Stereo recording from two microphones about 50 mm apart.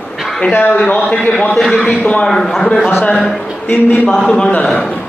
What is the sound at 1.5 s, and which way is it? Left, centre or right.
A man's voice, centre.